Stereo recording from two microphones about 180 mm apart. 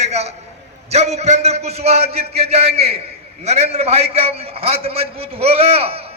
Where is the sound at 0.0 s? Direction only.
40° right (ahead or behind).